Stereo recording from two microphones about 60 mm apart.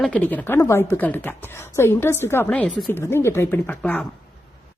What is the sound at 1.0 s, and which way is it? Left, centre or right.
Speech, left.